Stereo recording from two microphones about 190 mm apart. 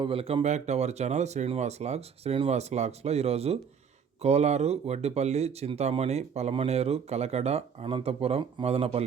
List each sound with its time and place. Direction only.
0.0 s speech: 30° right (ahead or behind)